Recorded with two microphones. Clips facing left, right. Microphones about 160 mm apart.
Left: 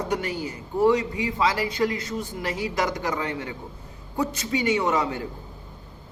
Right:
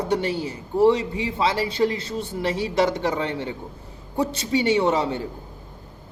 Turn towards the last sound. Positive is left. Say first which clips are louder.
# right 3 dB
turn(degrees=-30)  # may be behind; listen again after turning